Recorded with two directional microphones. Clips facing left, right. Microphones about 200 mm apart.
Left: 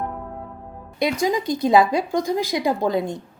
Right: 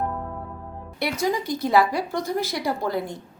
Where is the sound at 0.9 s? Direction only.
15° left (ahead or behind).